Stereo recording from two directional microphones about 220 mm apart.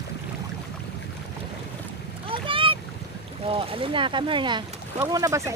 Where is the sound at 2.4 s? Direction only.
25° right (ahead or behind).